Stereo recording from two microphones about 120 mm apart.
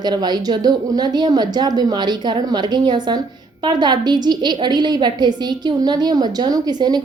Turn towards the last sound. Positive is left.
turn(degrees=-35)  # may be behind; listen again after turning